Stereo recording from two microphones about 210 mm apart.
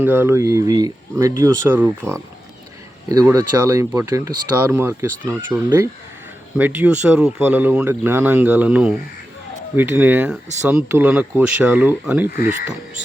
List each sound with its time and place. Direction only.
0.0 s speech: 10° right (ahead or behind)